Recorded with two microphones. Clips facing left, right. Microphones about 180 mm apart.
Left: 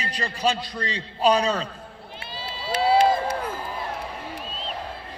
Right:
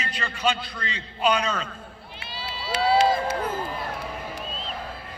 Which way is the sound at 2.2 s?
50° left (ahead or behind).